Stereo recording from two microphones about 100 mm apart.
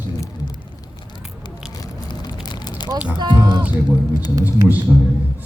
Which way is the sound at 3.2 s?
45° right (ahead or behind).